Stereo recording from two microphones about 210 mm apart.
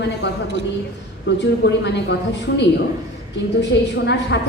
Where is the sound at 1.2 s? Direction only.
55° left (ahead or behind).